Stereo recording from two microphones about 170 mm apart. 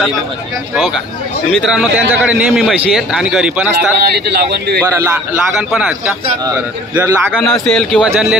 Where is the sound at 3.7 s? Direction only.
75° right (ahead or behind).